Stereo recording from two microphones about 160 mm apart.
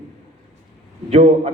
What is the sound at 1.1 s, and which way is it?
Speech, 40° right (ahead or behind).